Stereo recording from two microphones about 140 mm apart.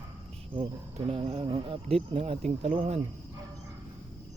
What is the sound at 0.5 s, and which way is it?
Speech, 45° right (ahead or behind).